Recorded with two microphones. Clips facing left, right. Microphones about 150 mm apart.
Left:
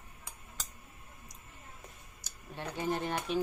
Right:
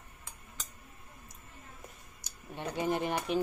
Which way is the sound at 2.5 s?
15° right (ahead or behind).